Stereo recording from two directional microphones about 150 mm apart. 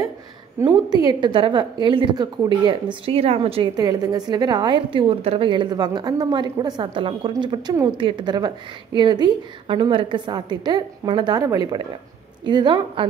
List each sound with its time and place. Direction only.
0.6 s a woman's voice: 30° right (ahead or behind)
3.7 s a woman's voice: 25° right (ahead or behind)